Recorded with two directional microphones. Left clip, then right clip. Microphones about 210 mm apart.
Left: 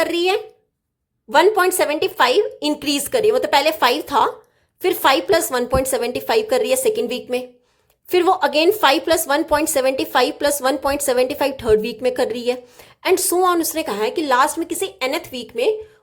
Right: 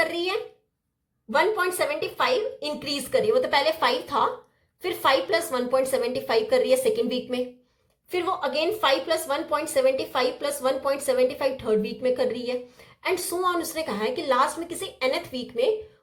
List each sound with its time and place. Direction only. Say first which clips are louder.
0.0 s a woman's voice: left 7 dB; 45° left (ahead or behind)
8.1 s a woman's voice: left 10 dB; 50° left (ahead or behind)